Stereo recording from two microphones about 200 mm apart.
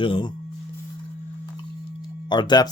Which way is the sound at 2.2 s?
20° left (ahead or behind).